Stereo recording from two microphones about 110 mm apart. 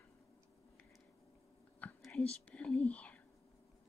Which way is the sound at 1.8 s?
15° left (ahead or behind).